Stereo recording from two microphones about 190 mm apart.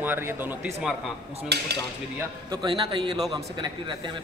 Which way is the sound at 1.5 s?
60° right (ahead or behind).